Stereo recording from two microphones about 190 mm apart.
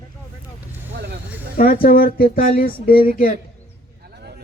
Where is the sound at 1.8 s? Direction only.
50° left (ahead or behind).